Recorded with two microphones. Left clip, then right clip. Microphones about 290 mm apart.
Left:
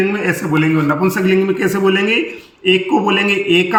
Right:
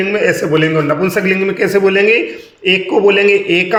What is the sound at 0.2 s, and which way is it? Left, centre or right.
A man's voice, centre.